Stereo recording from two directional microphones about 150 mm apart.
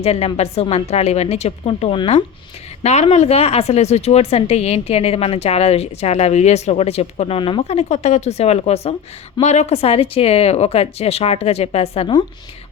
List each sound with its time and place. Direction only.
0.0 s a woman's voice: 45° left (ahead or behind)